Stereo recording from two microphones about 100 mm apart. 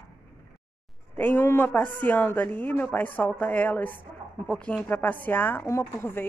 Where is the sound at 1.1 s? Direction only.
15° left (ahead or behind).